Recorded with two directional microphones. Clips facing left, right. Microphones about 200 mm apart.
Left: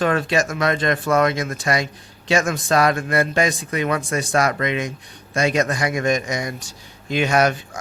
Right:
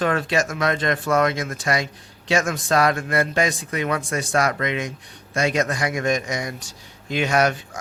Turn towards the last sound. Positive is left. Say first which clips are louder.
# left 2 dB
turn(degrees=15)  # may be behind; listen again after turning